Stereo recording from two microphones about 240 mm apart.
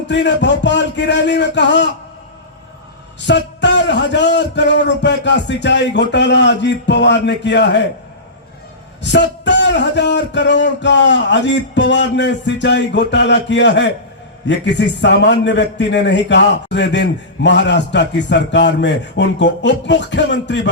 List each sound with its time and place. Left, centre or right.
0.1 s a man's voice: left
3.2 s a man's voice: left
9.0 s a man's voice: left